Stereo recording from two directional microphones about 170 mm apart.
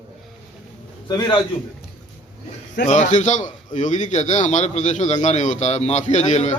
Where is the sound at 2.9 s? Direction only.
45° left (ahead or behind).